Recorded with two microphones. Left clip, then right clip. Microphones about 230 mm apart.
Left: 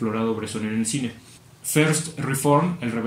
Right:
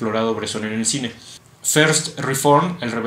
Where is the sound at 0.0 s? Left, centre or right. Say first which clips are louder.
Right 5 dB; centre.